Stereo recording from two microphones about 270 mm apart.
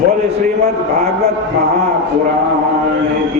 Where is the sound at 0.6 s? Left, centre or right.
Right.